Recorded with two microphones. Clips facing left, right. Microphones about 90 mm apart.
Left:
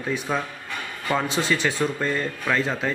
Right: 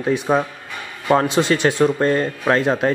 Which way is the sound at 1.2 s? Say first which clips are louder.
Right 7 dB; 65° right (ahead or behind).